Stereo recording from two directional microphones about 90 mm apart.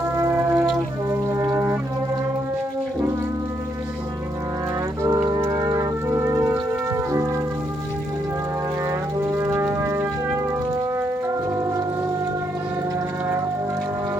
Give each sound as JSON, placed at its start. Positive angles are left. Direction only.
{"t": 0.2, "sound": "brass instrument", "side_deg": -30}
{"t": 5.0, "sound": "organ", "side_deg": -40}
{"t": 6.9, "sound": "music", "side_deg": -35}
{"t": 8.9, "sound": "brass instrument", "side_deg": -35}
{"t": 11.5, "sound": "music", "side_deg": -35}